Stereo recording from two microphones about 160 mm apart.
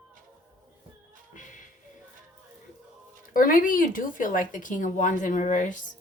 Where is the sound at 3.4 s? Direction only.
60° left (ahead or behind).